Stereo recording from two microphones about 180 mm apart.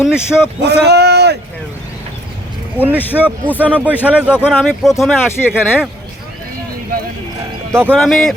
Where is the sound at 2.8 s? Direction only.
10° right (ahead or behind).